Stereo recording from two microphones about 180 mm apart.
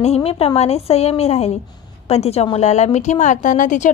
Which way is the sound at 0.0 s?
35° left (ahead or behind).